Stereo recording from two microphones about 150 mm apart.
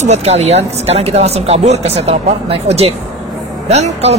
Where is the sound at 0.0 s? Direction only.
45° right (ahead or behind).